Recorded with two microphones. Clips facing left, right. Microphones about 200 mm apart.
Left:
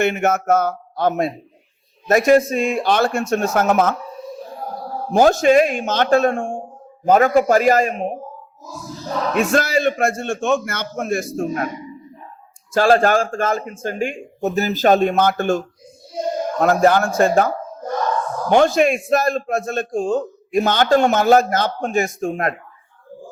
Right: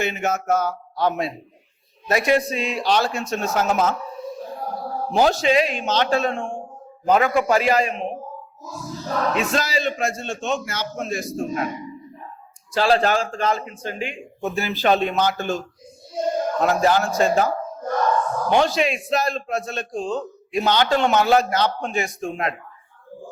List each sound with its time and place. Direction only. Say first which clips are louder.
0.0 s a man's voice: left 6 dB; 55° left (ahead or behind)
5.1 s a man's voice: left 5 dB; 50° left (ahead or behind)
9.3 s a man's voice: left 10 dB; 50° left (ahead or behind)
12.7 s a man's voice: left 4 dB; 45° left (ahead or behind)